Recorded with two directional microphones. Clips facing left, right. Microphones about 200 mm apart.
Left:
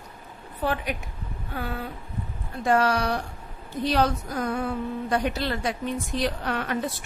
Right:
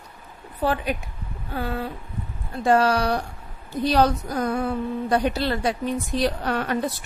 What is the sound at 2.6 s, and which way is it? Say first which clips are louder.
A woman's voice: right 3 dB; 30° right (ahead or behind).